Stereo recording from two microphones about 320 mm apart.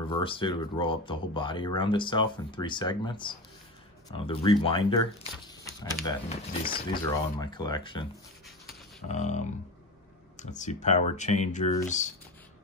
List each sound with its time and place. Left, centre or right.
0.1 s speech: centre
9.0 s speech: left